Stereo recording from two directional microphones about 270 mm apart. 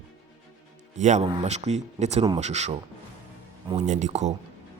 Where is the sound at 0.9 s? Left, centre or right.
Right.